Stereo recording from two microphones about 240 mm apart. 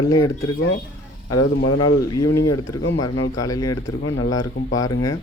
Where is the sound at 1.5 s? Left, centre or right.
Left.